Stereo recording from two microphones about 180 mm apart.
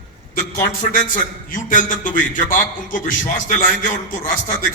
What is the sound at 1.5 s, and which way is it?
A man's voice, 45° left (ahead or behind).